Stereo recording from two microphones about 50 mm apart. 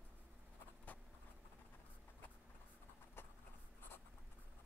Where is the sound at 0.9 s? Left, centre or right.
Left.